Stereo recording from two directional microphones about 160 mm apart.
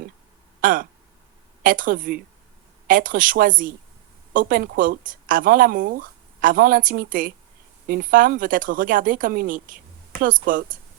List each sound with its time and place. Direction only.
0.6 s speech: 60° right (ahead or behind)